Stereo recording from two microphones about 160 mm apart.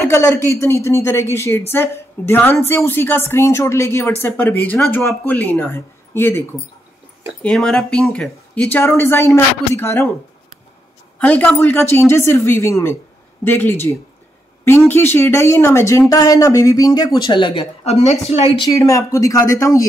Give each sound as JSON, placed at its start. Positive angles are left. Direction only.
{"t": 0.0, "sound": "speech", "side_deg": 15}
{"t": 7.4, "sound": "speech", "side_deg": 5}
{"t": 8.7, "sound": "speech", "side_deg": 15}
{"t": 11.1, "sound": "speech", "side_deg": 10}
{"t": 18.7, "sound": "speech", "side_deg": 20}